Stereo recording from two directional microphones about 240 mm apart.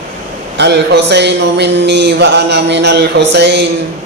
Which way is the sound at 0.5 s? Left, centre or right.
Right.